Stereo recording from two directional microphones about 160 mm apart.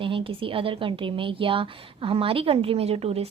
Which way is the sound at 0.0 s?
35° right (ahead or behind).